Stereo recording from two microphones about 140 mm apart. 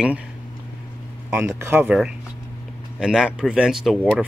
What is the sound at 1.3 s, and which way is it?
Speech, 20° right (ahead or behind).